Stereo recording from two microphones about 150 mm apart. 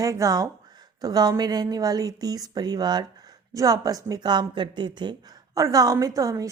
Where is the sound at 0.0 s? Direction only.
20° right (ahead or behind).